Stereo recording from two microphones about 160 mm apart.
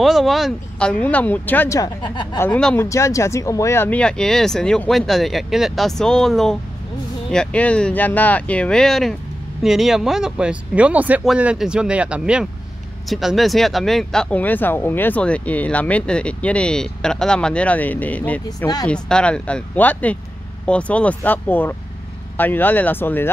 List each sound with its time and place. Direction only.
0.0 s speech: centre (ahead or behind)
1.8 s speech: 30° left (ahead or behind)
2.3 s speech: 10° left (ahead or behind)